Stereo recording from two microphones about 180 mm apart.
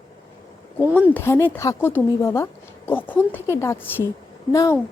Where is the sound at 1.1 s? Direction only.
15° left (ahead or behind).